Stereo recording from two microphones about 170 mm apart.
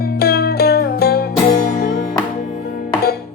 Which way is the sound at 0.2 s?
70° left (ahead or behind).